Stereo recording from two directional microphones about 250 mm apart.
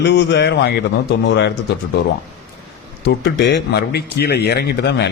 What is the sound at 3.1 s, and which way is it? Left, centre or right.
A man's voice, left.